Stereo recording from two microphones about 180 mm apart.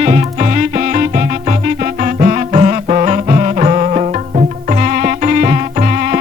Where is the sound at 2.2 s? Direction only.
35° right (ahead or behind).